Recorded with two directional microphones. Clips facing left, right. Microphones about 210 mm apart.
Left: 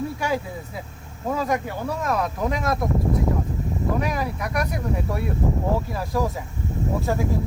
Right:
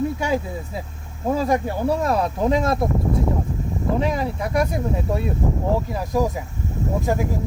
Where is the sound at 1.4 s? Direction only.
30° right (ahead or behind).